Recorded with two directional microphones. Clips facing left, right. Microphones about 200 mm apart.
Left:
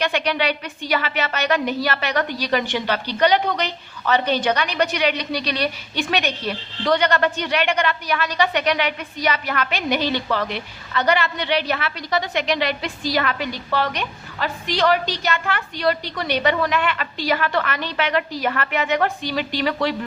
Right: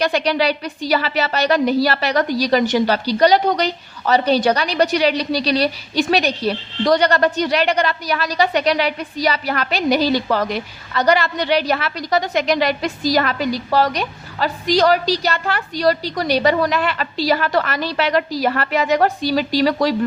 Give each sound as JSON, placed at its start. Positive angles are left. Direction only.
{"t": 0.0, "sound": "a woman's voice", "side_deg": -35}